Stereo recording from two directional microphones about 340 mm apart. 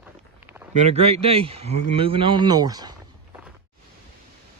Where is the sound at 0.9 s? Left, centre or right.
Centre.